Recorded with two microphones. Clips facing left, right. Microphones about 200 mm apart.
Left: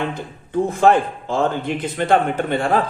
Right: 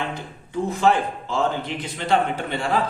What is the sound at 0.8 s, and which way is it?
A man's voice, 50° left (ahead or behind).